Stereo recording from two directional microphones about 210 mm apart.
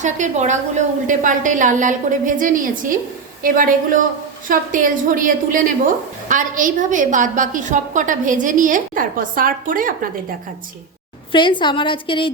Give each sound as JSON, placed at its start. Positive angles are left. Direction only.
{"t": 0.0, "sound": "a woman's voice", "side_deg": -35}
{"t": 11.3, "sound": "a woman's voice", "side_deg": 25}